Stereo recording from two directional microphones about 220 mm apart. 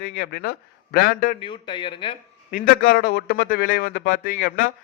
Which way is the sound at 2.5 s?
40° left (ahead or behind).